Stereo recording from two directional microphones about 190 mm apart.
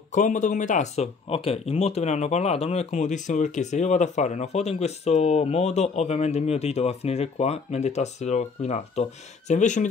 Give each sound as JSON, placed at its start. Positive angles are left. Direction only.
{"t": 0.1, "sound": "speech", "side_deg": 40}